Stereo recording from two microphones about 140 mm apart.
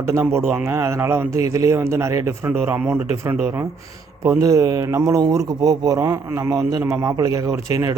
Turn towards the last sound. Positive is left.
turn(degrees=-20)  # may be behind; listen again after turning